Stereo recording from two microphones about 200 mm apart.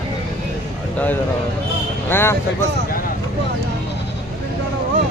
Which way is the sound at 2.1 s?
10° left (ahead or behind).